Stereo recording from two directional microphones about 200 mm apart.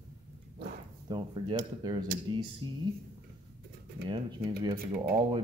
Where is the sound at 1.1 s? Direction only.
20° right (ahead or behind).